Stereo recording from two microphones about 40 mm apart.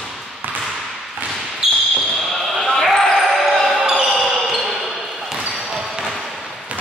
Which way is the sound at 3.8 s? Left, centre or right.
Centre.